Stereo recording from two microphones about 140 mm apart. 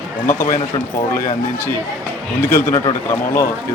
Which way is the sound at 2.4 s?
15° left (ahead or behind).